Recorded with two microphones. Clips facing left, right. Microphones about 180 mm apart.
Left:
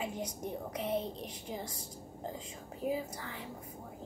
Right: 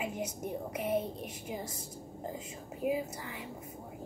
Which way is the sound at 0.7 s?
5° right (ahead or behind).